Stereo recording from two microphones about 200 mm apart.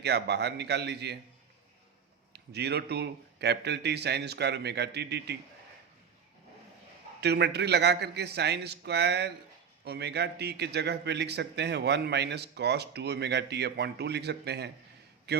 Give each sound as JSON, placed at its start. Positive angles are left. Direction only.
{"t": 0.0, "sound": "a man's voice", "side_deg": -60}
{"t": 2.3, "sound": "a man's voice", "side_deg": -55}
{"t": 7.2, "sound": "a man's voice", "side_deg": -55}